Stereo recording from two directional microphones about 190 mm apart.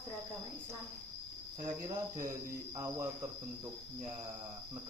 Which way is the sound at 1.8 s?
15° right (ahead or behind).